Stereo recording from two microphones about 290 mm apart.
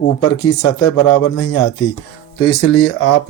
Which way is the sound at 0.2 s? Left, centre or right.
Left.